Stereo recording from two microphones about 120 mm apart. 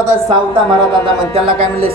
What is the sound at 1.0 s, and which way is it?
Speech, 50° right (ahead or behind).